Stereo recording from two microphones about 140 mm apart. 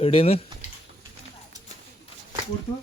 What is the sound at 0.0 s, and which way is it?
Speech, 40° left (ahead or behind).